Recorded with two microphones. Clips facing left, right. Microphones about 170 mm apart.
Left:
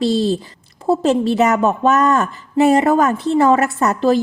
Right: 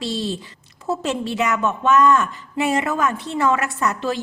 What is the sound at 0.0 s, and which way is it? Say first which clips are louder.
A woman's voice: left 9 dB; 35° left (ahead or behind).